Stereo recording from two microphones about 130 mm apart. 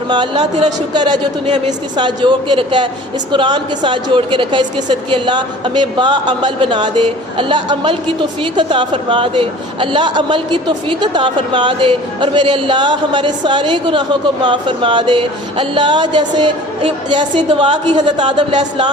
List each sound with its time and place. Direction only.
0.6 s a man's voice: 35° right (ahead or behind)